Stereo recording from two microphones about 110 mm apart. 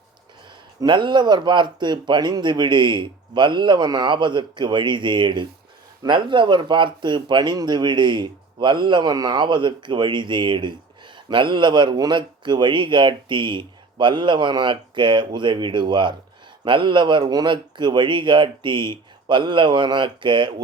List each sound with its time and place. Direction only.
0.8 s speech: 45° right (ahead or behind)